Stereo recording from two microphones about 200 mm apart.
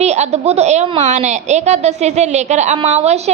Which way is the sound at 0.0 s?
35° right (ahead or behind).